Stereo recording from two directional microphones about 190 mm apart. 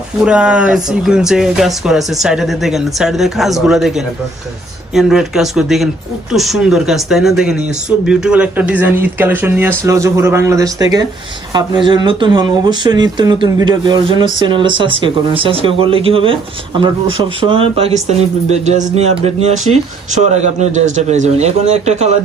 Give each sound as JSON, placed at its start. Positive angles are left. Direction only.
{"t": 0.2, "sound": "a man's voice", "side_deg": -5}